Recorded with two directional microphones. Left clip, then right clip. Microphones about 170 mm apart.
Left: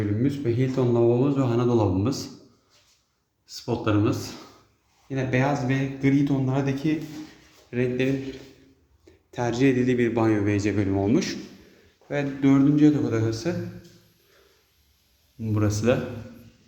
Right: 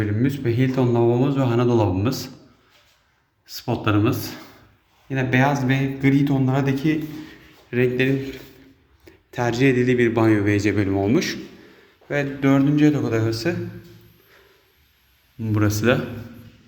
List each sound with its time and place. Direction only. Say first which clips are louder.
0.2 s speech: right 4 dB; centre (ahead or behind)
3.4 s speech: right 3 dB; centre (ahead or behind)
15.4 s speech: right 4 dB; centre (ahead or behind)